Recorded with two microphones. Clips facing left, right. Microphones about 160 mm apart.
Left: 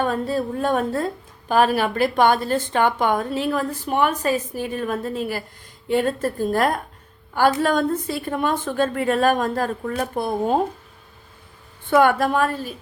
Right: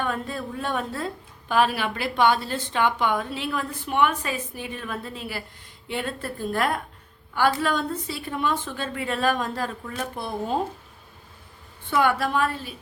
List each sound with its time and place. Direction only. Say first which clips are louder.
0.0 s a woman's voice: left 7 dB; 35° left (ahead or behind)
11.9 s a woman's voice: left 6 dB; 50° left (ahead or behind)